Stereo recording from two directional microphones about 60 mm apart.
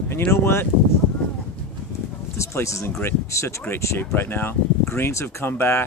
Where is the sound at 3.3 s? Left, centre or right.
Left.